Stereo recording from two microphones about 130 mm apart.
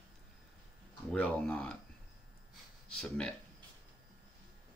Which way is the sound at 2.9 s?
5° left (ahead or behind).